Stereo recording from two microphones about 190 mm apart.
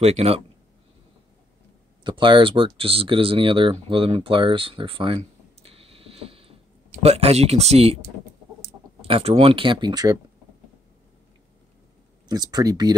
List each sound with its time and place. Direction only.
0.0 s speech: 35° right (ahead or behind)
2.0 s speech: 25° right (ahead or behind)
9.0 s speech: 30° right (ahead or behind)
12.3 s speech: 20° right (ahead or behind)